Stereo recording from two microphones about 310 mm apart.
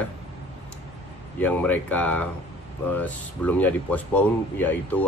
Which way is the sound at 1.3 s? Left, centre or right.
Centre.